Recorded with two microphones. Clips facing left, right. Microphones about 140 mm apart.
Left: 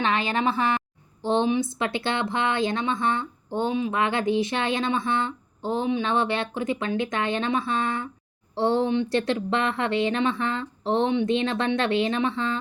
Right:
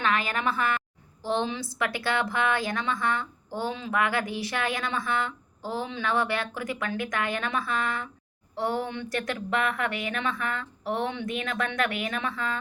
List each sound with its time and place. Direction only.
0.0 s a woman's voice: 25° left (ahead or behind)